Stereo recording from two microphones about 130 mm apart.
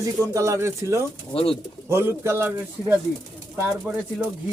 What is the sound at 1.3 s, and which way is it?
Speech, 45° left (ahead or behind).